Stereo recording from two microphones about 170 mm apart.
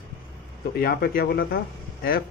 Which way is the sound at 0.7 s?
65° left (ahead or behind).